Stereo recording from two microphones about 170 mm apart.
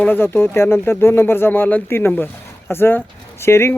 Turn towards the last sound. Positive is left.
turn(degrees=15)  # may be behind; listen again after turning